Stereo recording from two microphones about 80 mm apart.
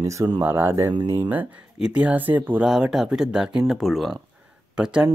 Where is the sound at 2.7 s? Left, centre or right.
Centre.